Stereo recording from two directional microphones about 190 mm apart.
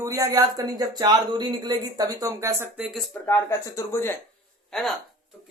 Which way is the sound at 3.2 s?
10° left (ahead or behind).